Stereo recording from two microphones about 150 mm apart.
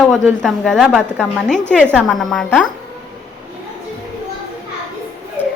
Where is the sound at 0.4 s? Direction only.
5° left (ahead or behind).